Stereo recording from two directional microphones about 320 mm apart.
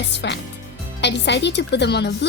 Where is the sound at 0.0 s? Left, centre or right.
Left.